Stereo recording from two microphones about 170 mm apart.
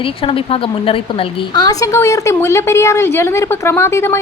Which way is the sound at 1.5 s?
20° left (ahead or behind).